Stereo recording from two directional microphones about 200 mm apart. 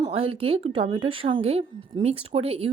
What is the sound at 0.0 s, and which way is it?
A woman's voice, 30° right (ahead or behind).